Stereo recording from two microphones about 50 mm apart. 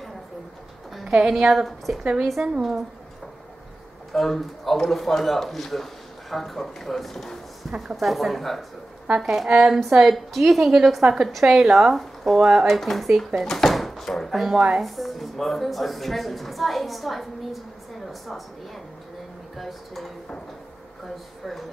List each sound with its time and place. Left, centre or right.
1.0 s a sound: centre
1.3 s a woman's voice: centre
2.4 s speech: centre
4.1 s a woman's voice: centre
13.4 s drawer open or close: centre
14.8 s a woman's voice: centre
19.5 s a woman's voice: centre